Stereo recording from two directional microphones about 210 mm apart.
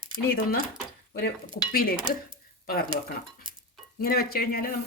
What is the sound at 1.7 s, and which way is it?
Speech, 45° left (ahead or behind).